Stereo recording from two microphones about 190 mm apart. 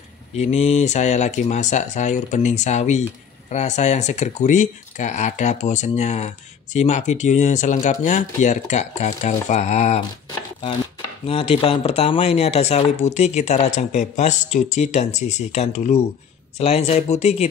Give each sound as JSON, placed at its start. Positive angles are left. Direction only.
{"t": 0.4, "sound": "speech", "side_deg": 35}
{"t": 11.2, "sound": "speech", "side_deg": 30}